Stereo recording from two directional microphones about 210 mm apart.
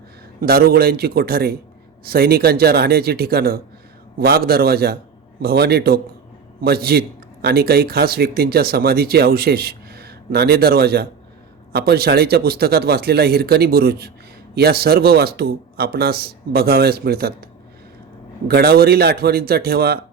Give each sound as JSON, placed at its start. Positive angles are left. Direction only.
{"t": 0.4, "sound": "speech", "side_deg": -45}
{"t": 18.4, "sound": "speech", "side_deg": -45}